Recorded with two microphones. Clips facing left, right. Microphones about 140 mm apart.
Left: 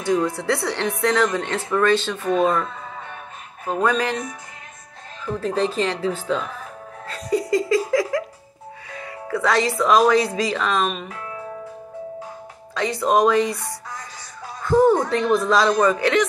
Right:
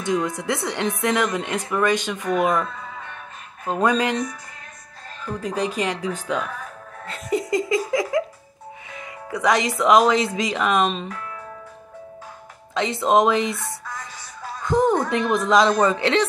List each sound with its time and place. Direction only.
0.0 s speech: 20° right (ahead or behind)
2.2 s speech: 30° left (ahead or behind)
3.6 s speech: 20° right (ahead or behind)
5.4 s speech: 15° right (ahead or behind)
7.1 s laughter: 25° right (ahead or behind)
8.9 s speech: 20° right (ahead or behind)
12.7 s speech: 20° right (ahead or behind)
14.7 s speech: 20° right (ahead or behind)